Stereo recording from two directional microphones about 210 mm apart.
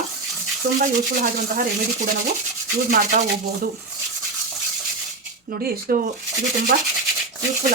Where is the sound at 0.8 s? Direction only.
40° right (ahead or behind).